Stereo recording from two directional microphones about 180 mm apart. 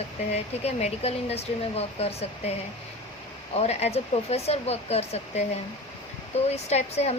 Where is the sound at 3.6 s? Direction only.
35° left (ahead or behind).